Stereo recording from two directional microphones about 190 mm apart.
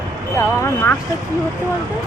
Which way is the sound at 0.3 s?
15° left (ahead or behind).